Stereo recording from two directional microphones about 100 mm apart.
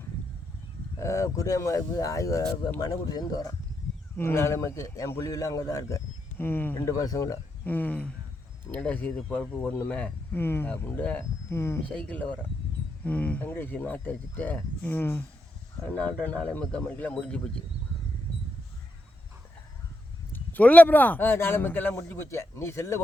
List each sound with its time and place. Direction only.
0.9 s speech: 30° left (ahead or behind)
4.2 s a man's voice: 25° left (ahead or behind)
6.3 s a man's voice: 20° left (ahead or behind)
6.8 s speech: 35° left (ahead or behind)
7.6 s speech: 20° left (ahead or behind)
11.9 s a man's voice: 10° left (ahead or behind)
20.3 s a man's voice: 15° left (ahead or behind)